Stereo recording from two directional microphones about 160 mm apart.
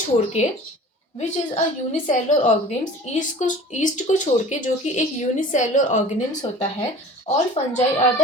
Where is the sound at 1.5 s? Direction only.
50° left (ahead or behind).